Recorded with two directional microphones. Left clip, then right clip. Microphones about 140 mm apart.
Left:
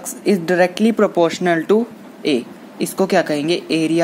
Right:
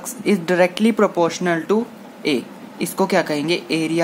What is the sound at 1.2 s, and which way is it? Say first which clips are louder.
Speech: left 3 dB; 20° left (ahead or behind).